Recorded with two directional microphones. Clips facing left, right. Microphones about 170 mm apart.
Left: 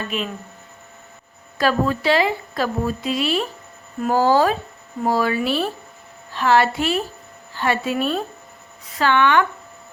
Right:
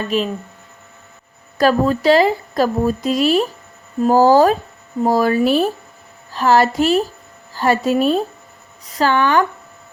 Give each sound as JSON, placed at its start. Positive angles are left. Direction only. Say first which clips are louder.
{"t": 0.1, "sound": "a woman's voice", "louder": "right 8 dB", "side_deg": -35}
{"t": 1.5, "sound": "a woman's voice", "louder": "right 5 dB", "side_deg": -40}